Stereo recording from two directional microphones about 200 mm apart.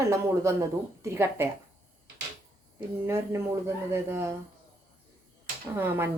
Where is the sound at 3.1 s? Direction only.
15° right (ahead or behind).